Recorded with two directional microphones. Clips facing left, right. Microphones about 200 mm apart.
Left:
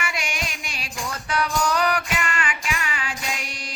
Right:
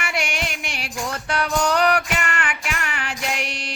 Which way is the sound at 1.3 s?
65° right (ahead or behind).